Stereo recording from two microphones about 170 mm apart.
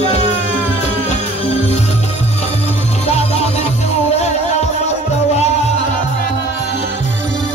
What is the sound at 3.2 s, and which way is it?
Music, 35° left (ahead or behind).